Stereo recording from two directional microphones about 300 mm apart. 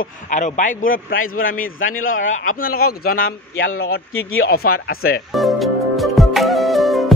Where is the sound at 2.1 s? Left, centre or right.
Left.